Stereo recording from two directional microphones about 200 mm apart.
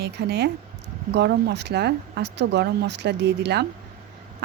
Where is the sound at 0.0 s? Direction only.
55° right (ahead or behind).